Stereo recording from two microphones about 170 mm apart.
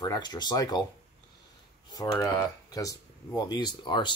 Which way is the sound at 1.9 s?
20° left (ahead or behind).